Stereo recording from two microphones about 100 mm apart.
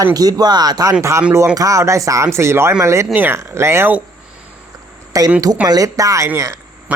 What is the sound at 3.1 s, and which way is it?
Speech, 20° right (ahead or behind).